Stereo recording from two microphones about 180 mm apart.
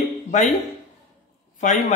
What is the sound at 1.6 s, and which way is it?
Speech, 40° left (ahead or behind).